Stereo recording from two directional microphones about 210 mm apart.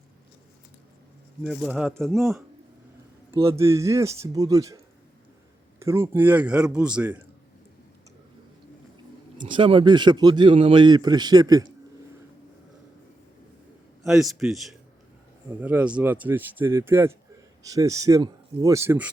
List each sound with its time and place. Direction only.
1.5 s a man's voice: centre (ahead or behind)
3.6 s speech: 15° right (ahead or behind)
5.8 s speech: 10° right (ahead or behind)
9.4 s speech: 25° right (ahead or behind)
14.0 s a man's voice: centre (ahead or behind)